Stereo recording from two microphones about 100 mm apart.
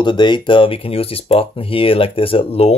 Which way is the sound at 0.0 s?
50° left (ahead or behind).